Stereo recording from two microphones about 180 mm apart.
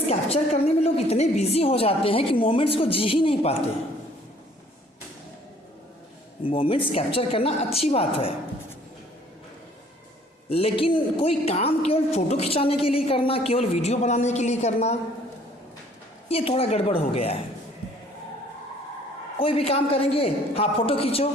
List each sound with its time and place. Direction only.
0.1 s a woman's voice: 35° left (ahead or behind)
6.5 s a woman's voice: 30° left (ahead or behind)
10.5 s a woman's voice: 30° left (ahead or behind)
16.3 s a woman's voice: 35° left (ahead or behind)
19.4 s a woman's voice: 30° left (ahead or behind)